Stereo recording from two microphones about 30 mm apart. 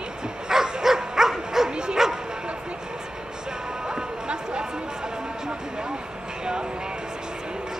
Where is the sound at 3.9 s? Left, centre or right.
Right.